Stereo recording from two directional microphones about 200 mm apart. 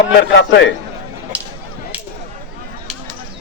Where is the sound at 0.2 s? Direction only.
65° left (ahead or behind).